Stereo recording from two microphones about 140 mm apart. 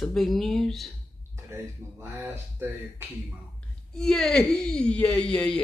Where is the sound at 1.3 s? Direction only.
15° right (ahead or behind).